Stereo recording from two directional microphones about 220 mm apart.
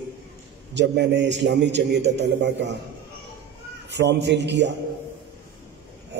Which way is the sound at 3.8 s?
50° right (ahead or behind).